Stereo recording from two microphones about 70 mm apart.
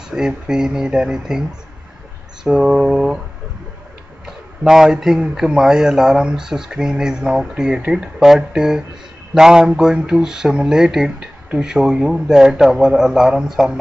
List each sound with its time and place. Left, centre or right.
0.1 s speech: centre
2.4 s speech: centre
4.6 s speech: centre